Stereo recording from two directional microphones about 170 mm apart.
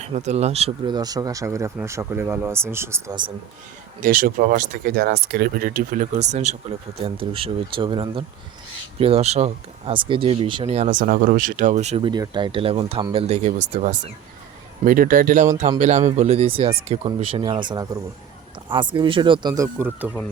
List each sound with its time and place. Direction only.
0.0 s speech: 40° right (ahead or behind)
0.9 s speech: 25° right (ahead or behind)
4.0 s speech: 55° right (ahead or behind)
7.0 s speech: 30° right (ahead or behind)
14.8 s speech: 55° right (ahead or behind); by 20.1 s 15° right (ahead or behind)